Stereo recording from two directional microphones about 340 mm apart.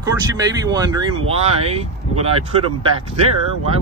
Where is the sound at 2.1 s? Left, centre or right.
Centre.